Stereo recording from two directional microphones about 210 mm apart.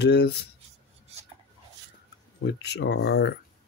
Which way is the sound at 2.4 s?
55° left (ahead or behind).